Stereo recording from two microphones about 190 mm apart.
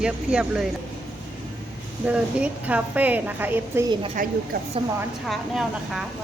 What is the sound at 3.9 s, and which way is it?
Speech, 30° right (ahead or behind).